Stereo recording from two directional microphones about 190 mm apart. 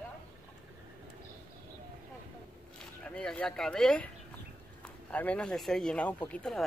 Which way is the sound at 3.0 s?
5° left (ahead or behind).